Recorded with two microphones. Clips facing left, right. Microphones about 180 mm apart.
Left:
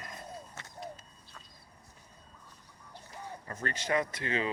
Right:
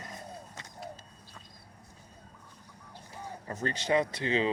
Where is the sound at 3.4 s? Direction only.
25° right (ahead or behind).